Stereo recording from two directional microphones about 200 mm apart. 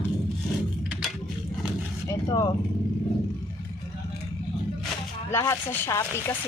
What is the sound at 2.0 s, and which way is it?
Vehicle, 15° left (ahead or behind).